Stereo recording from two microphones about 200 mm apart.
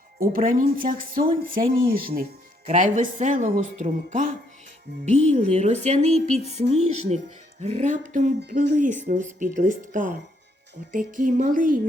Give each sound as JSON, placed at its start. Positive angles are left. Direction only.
{"t": 0.3, "sound": "speech", "side_deg": -45}
{"t": 4.9, "sound": "speech", "side_deg": -60}
{"t": 5.2, "sound": "speech", "side_deg": -35}
{"t": 8.4, "sound": "speech", "side_deg": -50}